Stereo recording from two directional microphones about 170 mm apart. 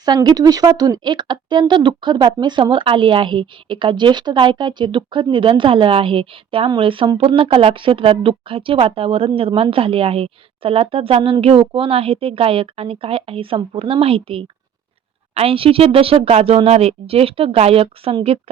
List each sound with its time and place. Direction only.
0.0 s speech: 25° right (ahead or behind)